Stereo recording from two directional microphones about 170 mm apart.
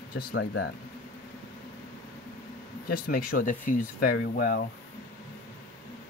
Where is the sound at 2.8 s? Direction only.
60° left (ahead or behind).